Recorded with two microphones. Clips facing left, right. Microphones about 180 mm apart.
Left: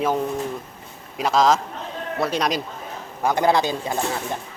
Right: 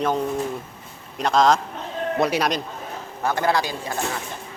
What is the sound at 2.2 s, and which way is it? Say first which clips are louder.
Speech: right 2 dB; 15° right (ahead or behind).